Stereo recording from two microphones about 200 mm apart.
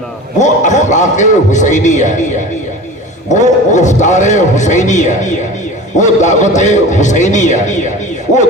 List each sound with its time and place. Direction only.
0.3 s a man's voice: 35° left (ahead or behind)
3.2 s a man's voice: 35° left (ahead or behind)